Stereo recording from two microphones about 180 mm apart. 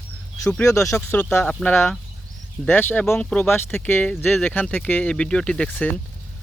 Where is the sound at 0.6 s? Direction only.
15° left (ahead or behind).